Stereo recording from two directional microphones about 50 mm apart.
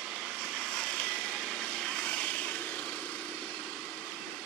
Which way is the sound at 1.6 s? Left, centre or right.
Centre.